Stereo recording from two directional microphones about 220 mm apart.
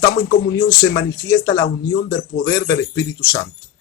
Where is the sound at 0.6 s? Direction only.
50° left (ahead or behind).